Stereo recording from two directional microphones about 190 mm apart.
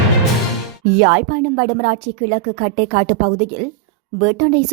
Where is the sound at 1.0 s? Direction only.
40° right (ahead or behind).